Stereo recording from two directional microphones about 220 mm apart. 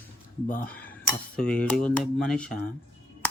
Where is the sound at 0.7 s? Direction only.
5° left (ahead or behind).